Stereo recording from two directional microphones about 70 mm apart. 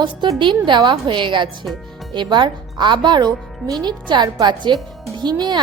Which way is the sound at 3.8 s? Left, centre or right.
Right.